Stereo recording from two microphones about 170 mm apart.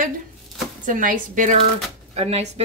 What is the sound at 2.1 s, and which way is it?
Speech, 40° right (ahead or behind).